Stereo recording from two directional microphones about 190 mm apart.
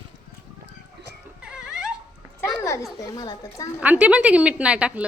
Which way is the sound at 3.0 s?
20° left (ahead or behind).